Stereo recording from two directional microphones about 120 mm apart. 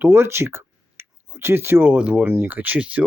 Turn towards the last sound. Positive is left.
turn(degrees=-15)  # may be behind; listen again after turning